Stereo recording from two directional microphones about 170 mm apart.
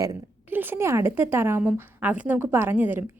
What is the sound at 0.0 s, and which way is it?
A woman's voice, 15° right (ahead or behind).